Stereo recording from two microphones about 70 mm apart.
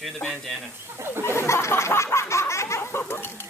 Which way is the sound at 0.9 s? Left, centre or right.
Right.